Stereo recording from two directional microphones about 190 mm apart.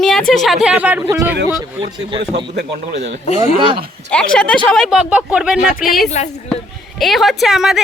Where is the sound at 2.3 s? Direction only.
60° right (ahead or behind).